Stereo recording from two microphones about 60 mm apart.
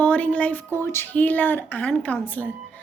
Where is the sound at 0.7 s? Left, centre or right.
Left.